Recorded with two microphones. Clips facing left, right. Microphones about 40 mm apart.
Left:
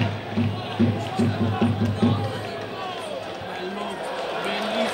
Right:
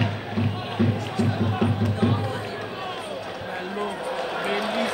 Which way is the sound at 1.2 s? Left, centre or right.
Left.